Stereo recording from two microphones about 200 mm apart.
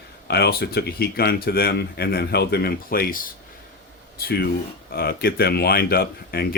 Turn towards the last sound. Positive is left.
turn(degrees=50)  # may be behind; listen again after turning